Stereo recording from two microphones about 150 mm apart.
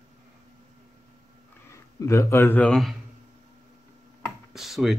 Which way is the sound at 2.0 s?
20° left (ahead or behind).